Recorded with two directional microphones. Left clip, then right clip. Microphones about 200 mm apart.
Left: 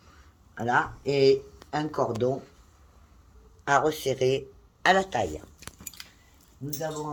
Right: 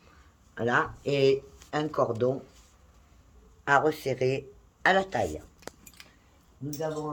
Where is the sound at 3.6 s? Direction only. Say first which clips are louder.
Even; 10° right (ahead or behind).